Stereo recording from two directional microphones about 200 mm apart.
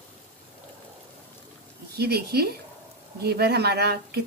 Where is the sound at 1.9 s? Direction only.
50° right (ahead or behind).